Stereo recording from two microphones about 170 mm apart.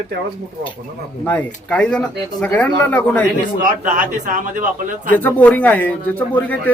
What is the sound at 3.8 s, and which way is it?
Speech, 50° right (ahead or behind).